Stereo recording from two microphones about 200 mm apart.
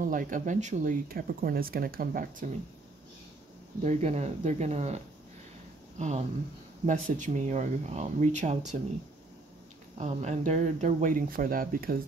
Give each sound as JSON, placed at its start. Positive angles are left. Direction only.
{"t": 0.0, "sound": "speech", "side_deg": -45}
{"t": 3.8, "sound": "speech", "side_deg": -35}
{"t": 9.9, "sound": "speech", "side_deg": -35}